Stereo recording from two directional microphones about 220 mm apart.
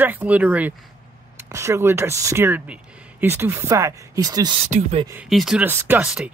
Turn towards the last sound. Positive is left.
turn(degrees=-5)  # may be behind; listen again after turning